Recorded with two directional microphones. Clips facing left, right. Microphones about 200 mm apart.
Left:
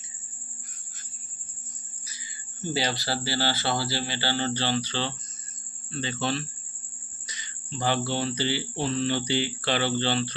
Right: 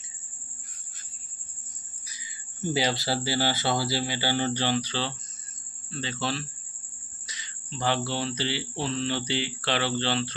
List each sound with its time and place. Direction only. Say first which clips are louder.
2.7 s speech: right 2 dB; 20° right (ahead or behind)
5.9 s cricket: left 2 dB; centre (ahead or behind)